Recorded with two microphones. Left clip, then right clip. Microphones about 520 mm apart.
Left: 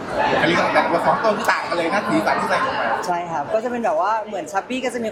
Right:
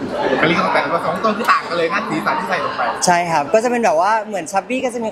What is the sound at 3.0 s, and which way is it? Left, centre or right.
Speech, right.